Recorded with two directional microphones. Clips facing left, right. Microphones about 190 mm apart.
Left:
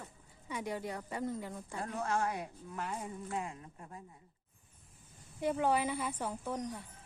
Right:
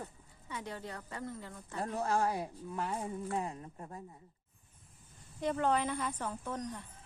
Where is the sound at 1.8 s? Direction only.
35° right (ahead or behind).